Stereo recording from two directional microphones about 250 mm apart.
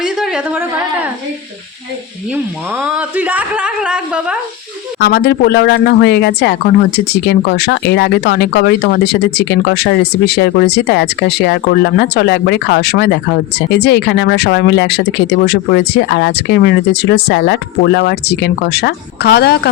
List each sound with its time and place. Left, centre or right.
0.0 s a sound: centre
2.3 s speech: centre
4.9 s speech: left